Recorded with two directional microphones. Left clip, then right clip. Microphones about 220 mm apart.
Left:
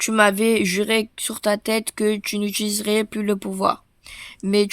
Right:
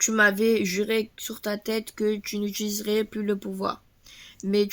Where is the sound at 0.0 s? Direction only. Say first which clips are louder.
Left 4 dB; 45° left (ahead or behind).